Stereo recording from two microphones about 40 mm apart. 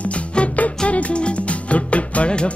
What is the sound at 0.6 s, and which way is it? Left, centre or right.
Music, left.